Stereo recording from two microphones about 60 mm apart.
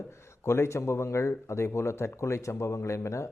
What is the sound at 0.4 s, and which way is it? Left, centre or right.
A man's voice, left.